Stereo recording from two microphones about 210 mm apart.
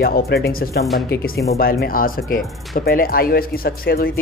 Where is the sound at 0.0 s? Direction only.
50° left (ahead or behind).